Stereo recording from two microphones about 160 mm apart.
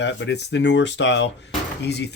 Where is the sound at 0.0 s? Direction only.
90° left.